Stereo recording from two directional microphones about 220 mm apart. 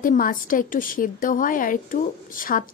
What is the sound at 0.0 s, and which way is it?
A woman's voice, 40° left (ahead or behind).